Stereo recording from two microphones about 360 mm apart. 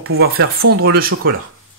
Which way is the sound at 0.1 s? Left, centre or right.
Right.